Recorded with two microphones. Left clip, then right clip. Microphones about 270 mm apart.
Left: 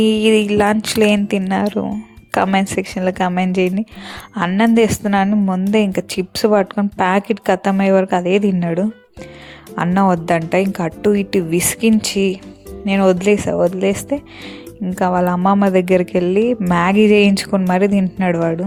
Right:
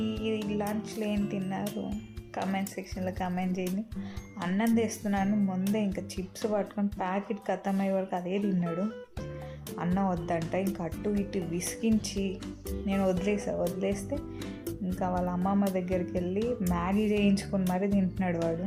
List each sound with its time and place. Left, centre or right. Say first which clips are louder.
0.0 s a woman's voice: left 19 dB; left